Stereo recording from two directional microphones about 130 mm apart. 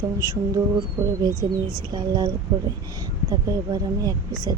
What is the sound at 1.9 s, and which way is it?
Speech, 30° right (ahead or behind).